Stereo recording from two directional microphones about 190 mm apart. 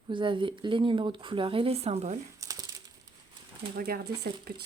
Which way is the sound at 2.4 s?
20° right (ahead or behind).